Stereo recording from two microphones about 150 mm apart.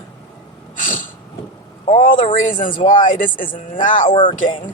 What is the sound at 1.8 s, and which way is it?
Speech, 55° left (ahead or behind).